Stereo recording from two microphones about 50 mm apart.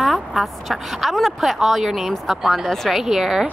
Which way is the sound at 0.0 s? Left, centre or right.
Centre.